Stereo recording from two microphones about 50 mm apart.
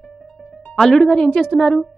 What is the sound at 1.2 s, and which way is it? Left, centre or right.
Speech, left.